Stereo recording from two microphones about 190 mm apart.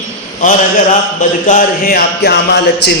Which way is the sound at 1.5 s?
45° left (ahead or behind).